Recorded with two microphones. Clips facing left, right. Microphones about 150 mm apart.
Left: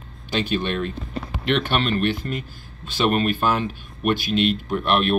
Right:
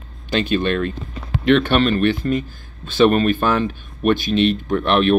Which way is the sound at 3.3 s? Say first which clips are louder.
Right 3 dB; 5° left (ahead or behind).